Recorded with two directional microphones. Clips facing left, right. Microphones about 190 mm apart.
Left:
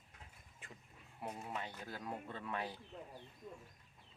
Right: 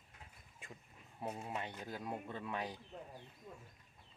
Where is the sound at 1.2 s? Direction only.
10° right (ahead or behind).